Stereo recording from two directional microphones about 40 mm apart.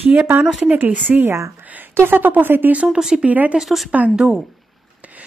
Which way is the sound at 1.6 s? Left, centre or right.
Right.